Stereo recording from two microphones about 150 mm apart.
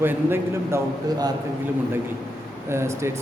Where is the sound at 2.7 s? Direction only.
15° right (ahead or behind).